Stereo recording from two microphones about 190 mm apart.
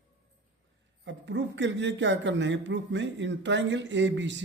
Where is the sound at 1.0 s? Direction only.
70° right (ahead or behind).